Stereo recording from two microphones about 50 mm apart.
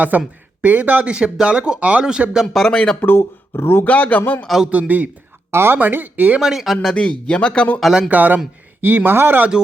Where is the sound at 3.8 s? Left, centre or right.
Left.